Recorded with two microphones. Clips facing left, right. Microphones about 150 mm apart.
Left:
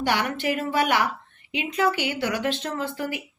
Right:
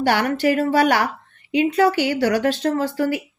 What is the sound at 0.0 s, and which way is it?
A woman's voice, 40° right (ahead or behind).